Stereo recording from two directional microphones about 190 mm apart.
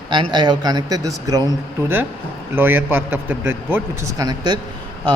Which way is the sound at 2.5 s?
10° right (ahead or behind).